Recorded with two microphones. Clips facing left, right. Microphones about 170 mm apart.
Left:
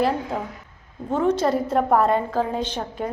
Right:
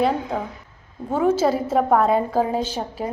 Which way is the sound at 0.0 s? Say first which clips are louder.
Right 1 dB; centre (ahead or behind).